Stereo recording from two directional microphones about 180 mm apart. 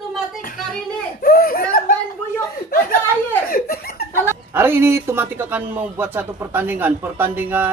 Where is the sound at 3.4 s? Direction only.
55° left (ahead or behind).